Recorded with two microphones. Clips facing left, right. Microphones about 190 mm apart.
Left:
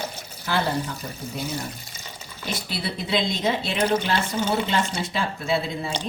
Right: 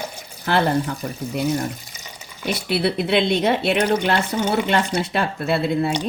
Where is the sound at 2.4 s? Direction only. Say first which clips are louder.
Right 9 dB; 65° right (ahead or behind).